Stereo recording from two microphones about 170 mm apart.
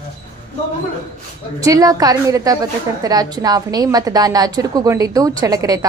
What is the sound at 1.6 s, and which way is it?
A woman's voice, 20° right (ahead or behind).